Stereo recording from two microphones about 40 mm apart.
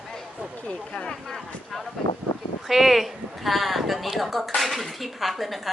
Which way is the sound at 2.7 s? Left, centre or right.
Centre.